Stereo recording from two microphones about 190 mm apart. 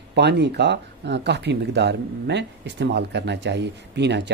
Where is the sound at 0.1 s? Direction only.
60° right (ahead or behind).